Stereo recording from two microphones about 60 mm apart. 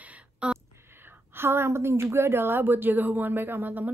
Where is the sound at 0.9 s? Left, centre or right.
Right.